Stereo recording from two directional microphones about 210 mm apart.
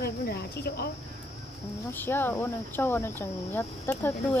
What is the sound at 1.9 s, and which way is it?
Speech, 10° left (ahead or behind).